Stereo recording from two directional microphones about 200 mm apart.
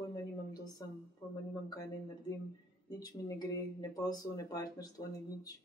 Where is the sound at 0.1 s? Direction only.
20° left (ahead or behind).